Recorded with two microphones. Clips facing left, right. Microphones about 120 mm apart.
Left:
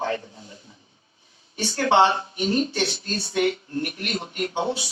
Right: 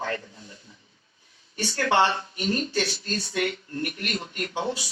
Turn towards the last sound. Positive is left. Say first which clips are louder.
# left 3 dB
turn(degrees=25)  # may be behind; listen again after turning